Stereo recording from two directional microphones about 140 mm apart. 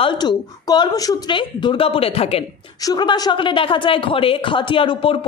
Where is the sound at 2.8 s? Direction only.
30° left (ahead or behind).